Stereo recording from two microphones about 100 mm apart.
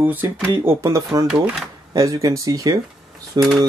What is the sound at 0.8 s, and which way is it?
Speech, 35° right (ahead or behind).